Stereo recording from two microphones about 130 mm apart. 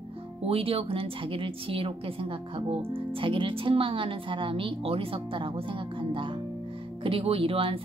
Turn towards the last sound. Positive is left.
turn(degrees=-45)  # may be behind; listen again after turning